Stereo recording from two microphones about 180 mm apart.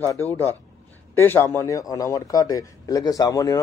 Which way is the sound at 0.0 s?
10° left (ahead or behind).